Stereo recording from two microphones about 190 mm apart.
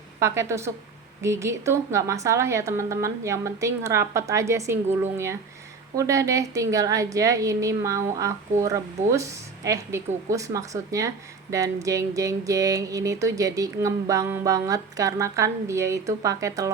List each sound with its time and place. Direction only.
0.2 s music: 15° right (ahead or behind)